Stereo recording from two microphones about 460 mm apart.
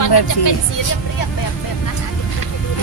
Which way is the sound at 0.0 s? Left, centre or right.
Left.